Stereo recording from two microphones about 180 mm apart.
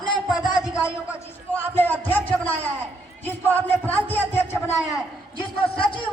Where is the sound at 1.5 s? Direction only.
10° left (ahead or behind).